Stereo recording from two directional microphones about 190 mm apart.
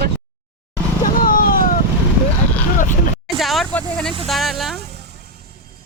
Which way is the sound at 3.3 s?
Centre (ahead or behind).